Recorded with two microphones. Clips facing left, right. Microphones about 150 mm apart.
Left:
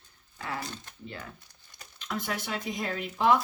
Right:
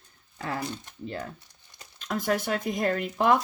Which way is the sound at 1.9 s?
45° right (ahead or behind).